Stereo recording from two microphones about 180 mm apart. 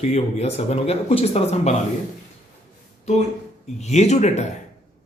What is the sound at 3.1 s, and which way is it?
Speech, 35° left (ahead or behind).